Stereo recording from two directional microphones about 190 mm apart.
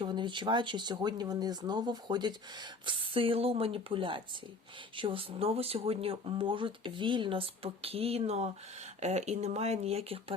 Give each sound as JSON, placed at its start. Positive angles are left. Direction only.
{"t": 0.0, "sound": "speech", "side_deg": -25}